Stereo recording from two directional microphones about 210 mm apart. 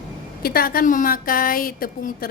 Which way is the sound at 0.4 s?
45° left (ahead or behind).